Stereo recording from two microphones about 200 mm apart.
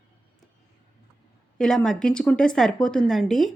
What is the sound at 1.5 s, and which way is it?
A woman's voice, 5° left (ahead or behind).